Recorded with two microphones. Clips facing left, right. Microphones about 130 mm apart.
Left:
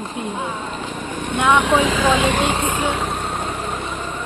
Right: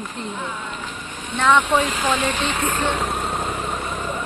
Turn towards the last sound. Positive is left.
turn(degrees=0)  # may be behind; listen again after turning